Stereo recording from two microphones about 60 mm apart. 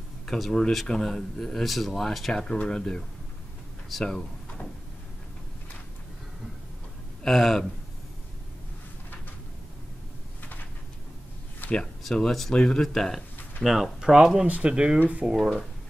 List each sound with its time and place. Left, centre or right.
0.3 s speech: centre
7.2 s speech: centre
12.0 s speech: centre
13.7 s speech: centre; by 15.3 s right